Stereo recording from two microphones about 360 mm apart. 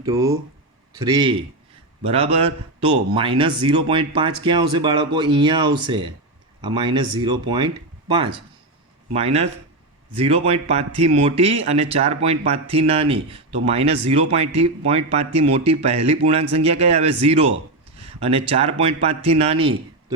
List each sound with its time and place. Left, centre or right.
0.0 s speech: centre